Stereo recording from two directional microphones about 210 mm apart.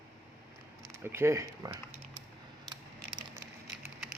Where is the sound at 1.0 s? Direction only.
10° right (ahead or behind).